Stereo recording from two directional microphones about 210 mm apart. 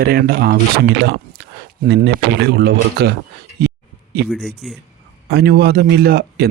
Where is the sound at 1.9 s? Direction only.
55° right (ahead or behind).